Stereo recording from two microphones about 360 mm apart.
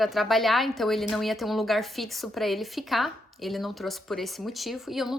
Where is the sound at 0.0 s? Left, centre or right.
Centre.